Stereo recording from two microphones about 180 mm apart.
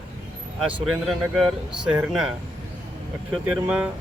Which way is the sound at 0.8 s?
Centre (ahead or behind).